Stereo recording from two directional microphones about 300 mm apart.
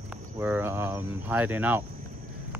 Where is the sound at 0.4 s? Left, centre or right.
Centre.